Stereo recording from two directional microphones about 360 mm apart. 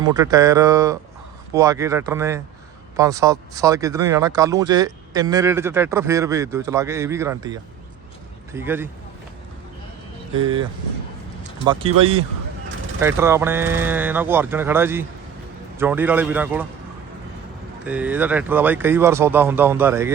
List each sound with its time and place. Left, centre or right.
0.0 s speech: centre
10.3 s speech: centre
11.9 s speech: right
13.0 s speech: centre
17.8 s speech: centre